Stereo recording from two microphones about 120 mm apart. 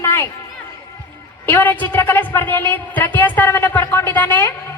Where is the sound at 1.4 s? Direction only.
15° left (ahead or behind).